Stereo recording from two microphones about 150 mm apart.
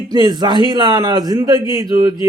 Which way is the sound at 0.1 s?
30° right (ahead or behind).